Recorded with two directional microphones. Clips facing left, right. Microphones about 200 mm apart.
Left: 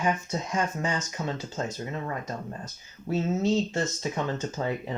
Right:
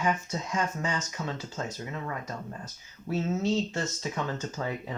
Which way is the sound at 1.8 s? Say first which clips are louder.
Left 3 dB; 35° left (ahead or behind).